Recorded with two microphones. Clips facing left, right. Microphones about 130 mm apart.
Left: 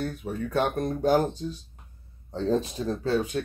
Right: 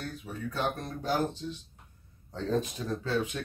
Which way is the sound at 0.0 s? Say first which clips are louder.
Left 7 dB; 60° left (ahead or behind).